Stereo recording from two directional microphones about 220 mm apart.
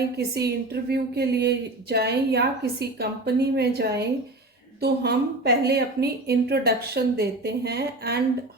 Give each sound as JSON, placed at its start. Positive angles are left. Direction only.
{"t": 0.3, "sound": "speech", "side_deg": -45}